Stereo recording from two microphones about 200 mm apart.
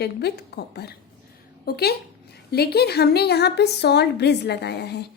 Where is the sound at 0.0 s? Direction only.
55° left (ahead or behind).